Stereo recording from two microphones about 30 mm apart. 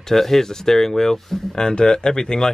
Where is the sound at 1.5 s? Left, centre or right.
Left.